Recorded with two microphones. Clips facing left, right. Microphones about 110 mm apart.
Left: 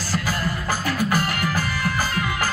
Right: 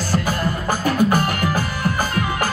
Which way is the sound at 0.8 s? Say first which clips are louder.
Right 6 dB; 55° right (ahead or behind).